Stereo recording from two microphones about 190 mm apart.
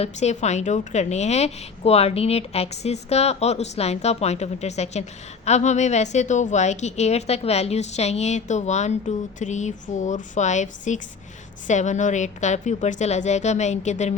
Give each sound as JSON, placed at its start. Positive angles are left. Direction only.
{"t": 0.0, "sound": "a woman's voice", "side_deg": 35}